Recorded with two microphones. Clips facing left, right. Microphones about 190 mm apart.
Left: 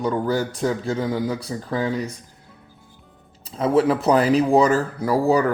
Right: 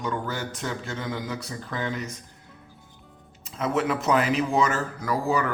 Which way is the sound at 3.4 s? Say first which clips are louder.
Left 7 dB; 35° left (ahead or behind).